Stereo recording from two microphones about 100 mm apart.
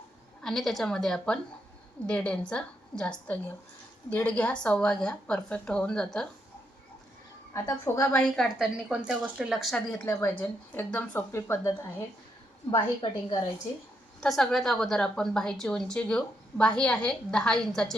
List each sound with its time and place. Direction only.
0.4 s a woman's voice: centre (ahead or behind)
7.5 s a woman's voice: 30° left (ahead or behind)
8.1 s a woman's voice: 10° left (ahead or behind)
8.4 s speech: 5° right (ahead or behind)
10.1 s a woman's voice: 20° left (ahead or behind)
11.3 s a woman's voice: 30° left (ahead or behind)
12.7 s a woman's voice: 50° left (ahead or behind)
14.2 s a woman's voice: 5° left (ahead or behind)